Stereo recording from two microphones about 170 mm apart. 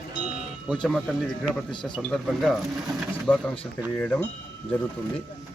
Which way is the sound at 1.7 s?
25° left (ahead or behind).